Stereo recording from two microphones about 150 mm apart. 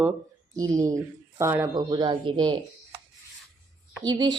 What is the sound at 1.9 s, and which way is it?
Speech, 30° right (ahead or behind).